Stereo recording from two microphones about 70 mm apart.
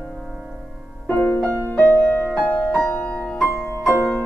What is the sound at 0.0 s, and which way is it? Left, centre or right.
Music, centre.